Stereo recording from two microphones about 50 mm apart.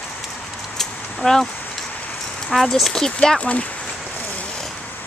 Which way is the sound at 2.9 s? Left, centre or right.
Centre.